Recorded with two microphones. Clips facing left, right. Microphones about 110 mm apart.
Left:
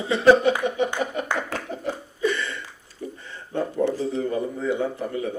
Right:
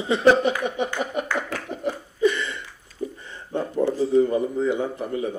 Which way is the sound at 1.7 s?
20° right (ahead or behind).